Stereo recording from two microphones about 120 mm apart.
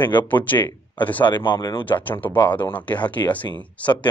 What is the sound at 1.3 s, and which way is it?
Speech, 40° left (ahead or behind).